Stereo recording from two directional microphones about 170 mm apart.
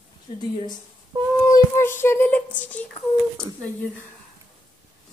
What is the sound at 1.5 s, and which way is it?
Speech, 15° left (ahead or behind).